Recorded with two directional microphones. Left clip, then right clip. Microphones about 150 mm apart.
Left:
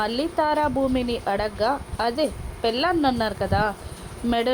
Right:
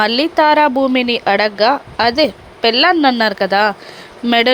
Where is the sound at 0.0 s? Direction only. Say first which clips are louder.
Right 11 dB; 45° right (ahead or behind).